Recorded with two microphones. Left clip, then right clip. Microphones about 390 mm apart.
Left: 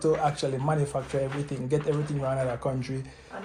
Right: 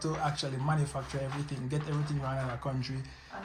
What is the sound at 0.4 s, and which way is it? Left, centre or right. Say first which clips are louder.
Speech: left 7 dB; left.